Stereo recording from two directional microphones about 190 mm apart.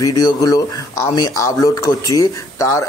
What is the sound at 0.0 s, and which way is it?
Speech, 20° left (ahead or behind).